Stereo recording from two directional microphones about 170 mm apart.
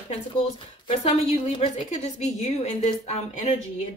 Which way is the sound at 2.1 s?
45° left (ahead or behind).